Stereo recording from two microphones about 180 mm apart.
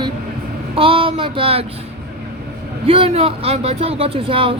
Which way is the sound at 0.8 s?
30° right (ahead or behind).